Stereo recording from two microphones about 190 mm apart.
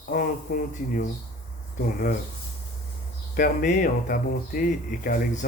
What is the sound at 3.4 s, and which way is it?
Speech, 50° left (ahead or behind).